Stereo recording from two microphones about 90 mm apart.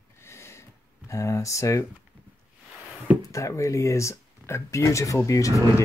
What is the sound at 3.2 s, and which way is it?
Speech, 35° left (ahead or behind).